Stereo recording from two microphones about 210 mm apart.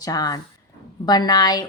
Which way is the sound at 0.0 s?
20° left (ahead or behind).